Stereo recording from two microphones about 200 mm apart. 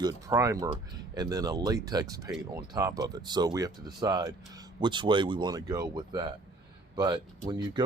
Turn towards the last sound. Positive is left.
turn(degrees=-20)  # may be behind; listen again after turning